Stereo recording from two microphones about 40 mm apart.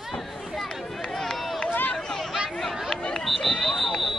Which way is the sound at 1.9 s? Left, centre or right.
Centre.